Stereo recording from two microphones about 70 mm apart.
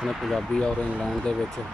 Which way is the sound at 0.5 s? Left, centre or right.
Centre.